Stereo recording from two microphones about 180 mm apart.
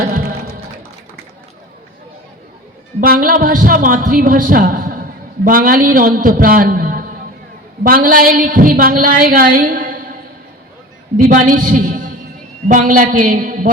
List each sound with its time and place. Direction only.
0.0 s music: 50° right (ahead or behind)
3.0 s a woman's voice: 55° right (ahead or behind)
11.2 s a man's voice: 45° right (ahead or behind)